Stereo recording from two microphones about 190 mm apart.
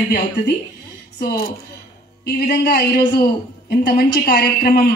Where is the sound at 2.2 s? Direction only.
55° left (ahead or behind).